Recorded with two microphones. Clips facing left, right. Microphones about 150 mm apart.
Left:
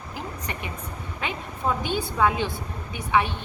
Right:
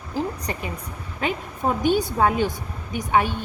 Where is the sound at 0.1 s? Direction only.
35° right (ahead or behind).